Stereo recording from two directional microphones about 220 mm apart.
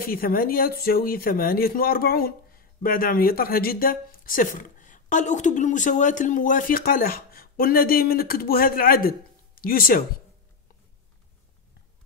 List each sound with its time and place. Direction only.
0.0 s speech: 40° left (ahead or behind)